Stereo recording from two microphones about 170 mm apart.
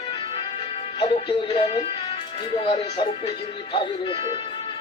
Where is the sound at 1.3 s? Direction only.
30° left (ahead or behind).